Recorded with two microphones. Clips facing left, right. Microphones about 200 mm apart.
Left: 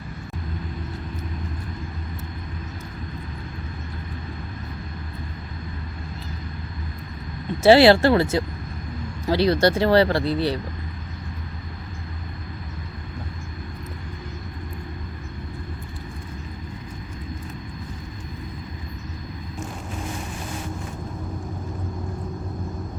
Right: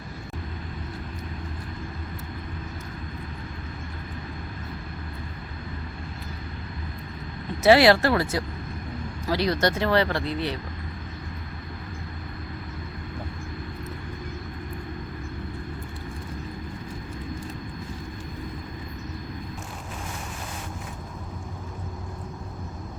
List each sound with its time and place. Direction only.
7.6 s speech: 30° left (ahead or behind)